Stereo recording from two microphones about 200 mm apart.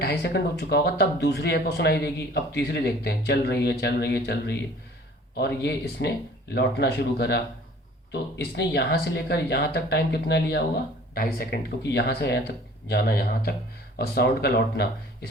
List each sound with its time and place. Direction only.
0.0 s speech: 55° left (ahead or behind)